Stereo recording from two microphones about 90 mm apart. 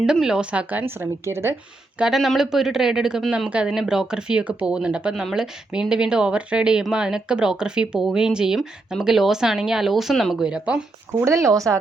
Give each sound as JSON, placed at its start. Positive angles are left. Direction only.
{"t": 0.0, "sound": "speech", "side_deg": -5}
{"t": 2.0, "sound": "speech", "side_deg": -5}
{"t": 11.1, "sound": "speech", "side_deg": -30}